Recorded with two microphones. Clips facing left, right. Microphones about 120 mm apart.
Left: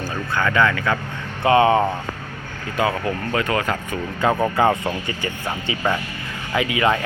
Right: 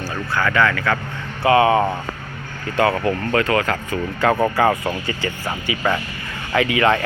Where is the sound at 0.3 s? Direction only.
20° left (ahead or behind).